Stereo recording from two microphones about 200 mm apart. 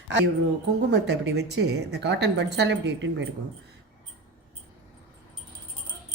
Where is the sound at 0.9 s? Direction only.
60° right (ahead or behind).